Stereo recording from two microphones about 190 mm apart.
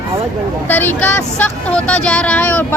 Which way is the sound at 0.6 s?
10° left (ahead or behind).